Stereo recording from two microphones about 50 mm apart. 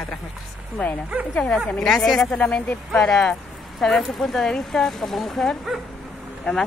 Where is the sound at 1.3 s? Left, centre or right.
Left.